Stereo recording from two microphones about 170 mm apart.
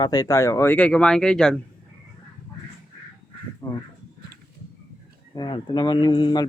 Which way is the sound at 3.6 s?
20° left (ahead or behind).